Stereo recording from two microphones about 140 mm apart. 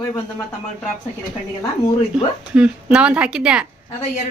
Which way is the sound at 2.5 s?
5° right (ahead or behind).